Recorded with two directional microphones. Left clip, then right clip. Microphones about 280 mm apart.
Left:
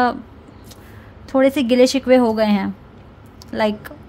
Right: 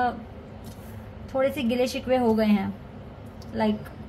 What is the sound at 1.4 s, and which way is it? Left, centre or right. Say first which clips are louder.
A woman's voice: left 11 dB; left.